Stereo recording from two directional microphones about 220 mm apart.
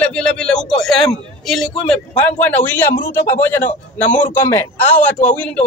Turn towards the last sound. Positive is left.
turn(degrees=5)  # may be behind; listen again after turning